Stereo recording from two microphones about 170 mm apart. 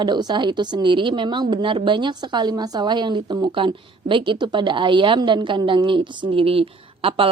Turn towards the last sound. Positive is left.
turn(degrees=-35)  # may be behind; listen again after turning